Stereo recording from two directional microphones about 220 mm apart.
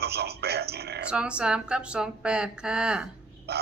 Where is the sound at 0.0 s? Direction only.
45° right (ahead or behind).